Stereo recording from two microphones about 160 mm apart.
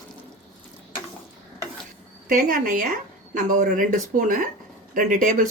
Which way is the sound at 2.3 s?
60° right (ahead or behind).